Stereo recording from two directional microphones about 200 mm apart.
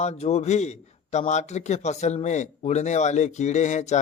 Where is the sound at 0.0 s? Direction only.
30° left (ahead or behind).